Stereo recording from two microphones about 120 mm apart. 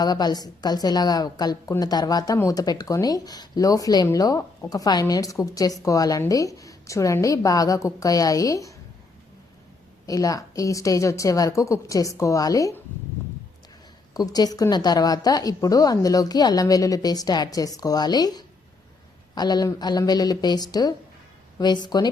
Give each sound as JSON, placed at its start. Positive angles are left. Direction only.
{"t": 0.0, "sound": "a woman's voice", "side_deg": 35}
{"t": 10.1, "sound": "speech", "side_deg": 30}
{"t": 14.1, "sound": "a woman's voice", "side_deg": 35}